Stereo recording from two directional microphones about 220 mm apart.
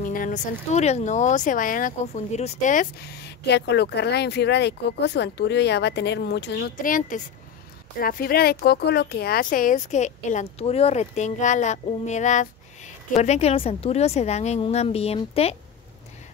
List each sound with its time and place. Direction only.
0.0 s speech: 35° left (ahead or behind)